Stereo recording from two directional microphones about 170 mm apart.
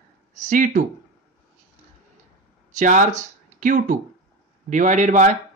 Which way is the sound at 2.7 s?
45° right (ahead or behind).